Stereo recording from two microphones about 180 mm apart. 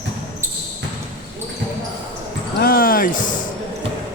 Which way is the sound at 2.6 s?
55° left (ahead or behind).